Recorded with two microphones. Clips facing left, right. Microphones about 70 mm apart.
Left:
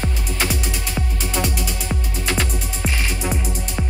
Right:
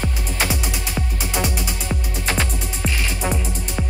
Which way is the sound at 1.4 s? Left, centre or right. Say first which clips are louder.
Even; right.